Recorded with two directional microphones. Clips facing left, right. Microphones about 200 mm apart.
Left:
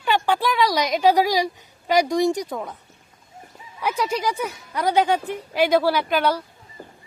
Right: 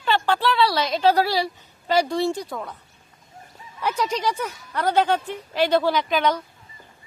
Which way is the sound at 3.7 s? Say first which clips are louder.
Left 1 dB; 10° left (ahead or behind).